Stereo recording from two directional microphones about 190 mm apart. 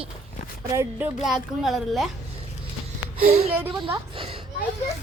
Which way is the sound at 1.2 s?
Centre (ahead or behind).